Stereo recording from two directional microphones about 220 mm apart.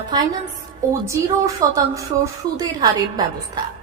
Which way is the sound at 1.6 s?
15° right (ahead or behind).